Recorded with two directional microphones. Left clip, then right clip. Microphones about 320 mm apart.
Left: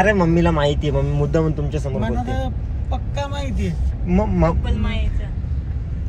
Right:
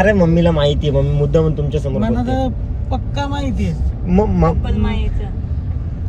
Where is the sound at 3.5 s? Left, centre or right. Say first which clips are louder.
Right 4 dB; centre.